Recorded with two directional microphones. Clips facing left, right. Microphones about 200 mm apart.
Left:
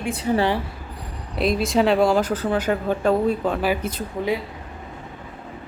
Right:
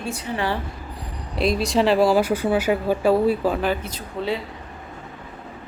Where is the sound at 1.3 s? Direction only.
Centre (ahead or behind).